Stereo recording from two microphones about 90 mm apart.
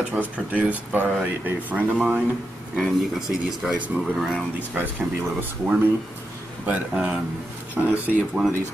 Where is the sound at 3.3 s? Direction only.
10° right (ahead or behind).